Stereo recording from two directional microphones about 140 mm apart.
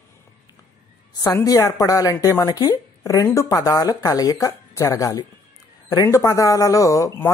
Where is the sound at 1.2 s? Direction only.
25° left (ahead or behind).